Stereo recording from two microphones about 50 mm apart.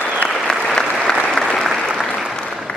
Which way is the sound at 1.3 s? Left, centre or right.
Centre.